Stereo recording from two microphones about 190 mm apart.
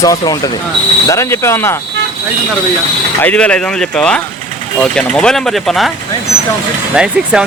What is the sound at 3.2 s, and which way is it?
Speech, 5° left (ahead or behind).